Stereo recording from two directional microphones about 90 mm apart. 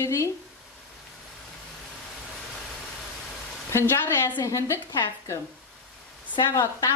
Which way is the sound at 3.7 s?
30° left (ahead or behind).